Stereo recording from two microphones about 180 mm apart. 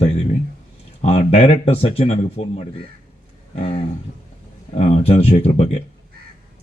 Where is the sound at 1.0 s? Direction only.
35° left (ahead or behind).